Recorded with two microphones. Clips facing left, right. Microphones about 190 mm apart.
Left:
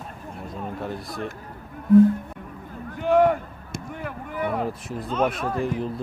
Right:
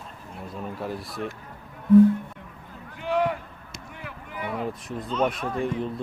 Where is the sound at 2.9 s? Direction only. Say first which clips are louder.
Left 7 dB; 50° left (ahead or behind).